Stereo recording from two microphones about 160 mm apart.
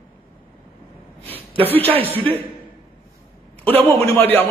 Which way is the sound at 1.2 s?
10° left (ahead or behind).